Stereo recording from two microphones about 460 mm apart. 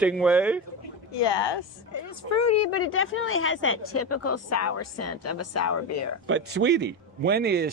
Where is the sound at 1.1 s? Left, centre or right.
Left.